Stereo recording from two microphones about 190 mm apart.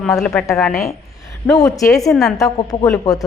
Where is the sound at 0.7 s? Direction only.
15° left (ahead or behind).